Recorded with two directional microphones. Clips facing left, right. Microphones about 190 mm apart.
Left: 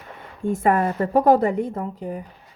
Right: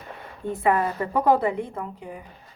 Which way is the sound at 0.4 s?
45° left (ahead or behind).